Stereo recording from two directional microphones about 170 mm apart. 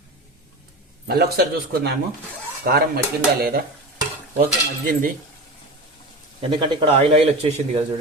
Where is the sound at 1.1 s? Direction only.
65° right (ahead or behind).